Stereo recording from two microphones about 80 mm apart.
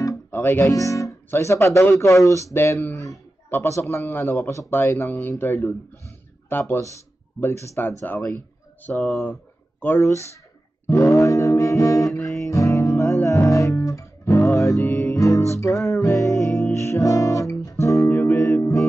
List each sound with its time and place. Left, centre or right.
0.3 s speech: left
0.7 s speech: left
9.3 s a sound: left
10.9 s music: left
18.0 s music: left